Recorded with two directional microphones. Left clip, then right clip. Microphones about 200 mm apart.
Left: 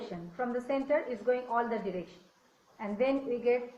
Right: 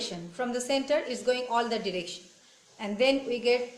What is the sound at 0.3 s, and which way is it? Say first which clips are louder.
A woman's voice: right 3 dB; 30° right (ahead or behind).